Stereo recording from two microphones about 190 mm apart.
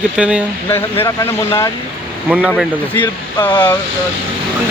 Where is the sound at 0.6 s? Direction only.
10° left (ahead or behind).